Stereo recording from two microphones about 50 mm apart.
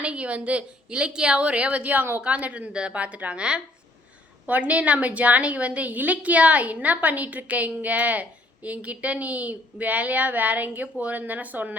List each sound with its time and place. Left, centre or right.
0.0 s a woman's voice: right
4.4 s a woman's voice: right